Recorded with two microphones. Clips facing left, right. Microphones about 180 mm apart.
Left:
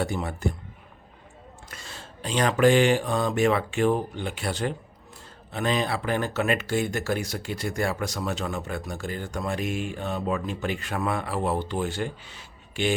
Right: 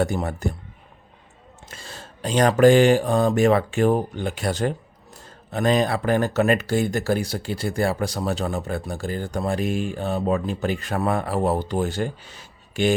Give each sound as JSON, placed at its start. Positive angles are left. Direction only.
{"t": 0.0, "sound": "speech", "side_deg": -45}
{"t": 1.7, "sound": "speech", "side_deg": -35}